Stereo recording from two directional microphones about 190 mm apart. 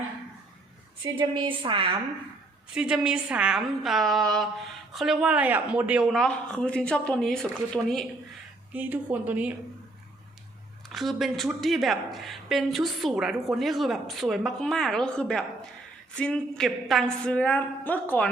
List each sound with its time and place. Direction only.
1.1 s a woman's voice: 25° right (ahead or behind)
2.7 s speech: 5° right (ahead or behind)
8.7 s speech: 10° right (ahead or behind)
10.8 s speech: centre (ahead or behind)